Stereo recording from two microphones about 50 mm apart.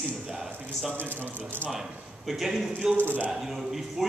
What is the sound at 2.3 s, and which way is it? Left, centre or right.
Speech, centre.